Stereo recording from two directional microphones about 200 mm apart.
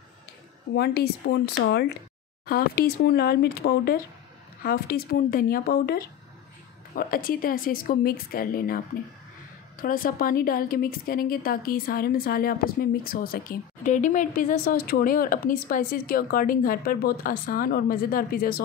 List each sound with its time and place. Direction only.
0.7 s a woman's voice: 50° left (ahead or behind)